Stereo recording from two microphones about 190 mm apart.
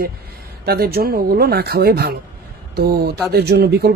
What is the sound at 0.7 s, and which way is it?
Speech, 55° right (ahead or behind).